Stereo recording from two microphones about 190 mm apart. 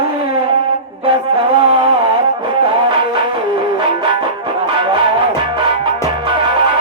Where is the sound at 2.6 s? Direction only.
25° right (ahead or behind).